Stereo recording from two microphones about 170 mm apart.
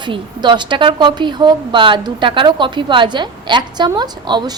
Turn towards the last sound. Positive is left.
turn(degrees=-25)  # may be behind; listen again after turning